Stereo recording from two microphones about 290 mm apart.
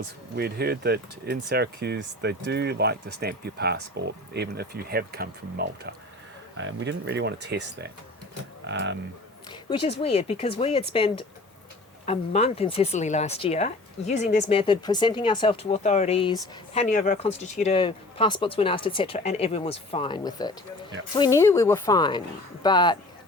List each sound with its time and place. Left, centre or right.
0.3 s speech: right
9.5 s speech: centre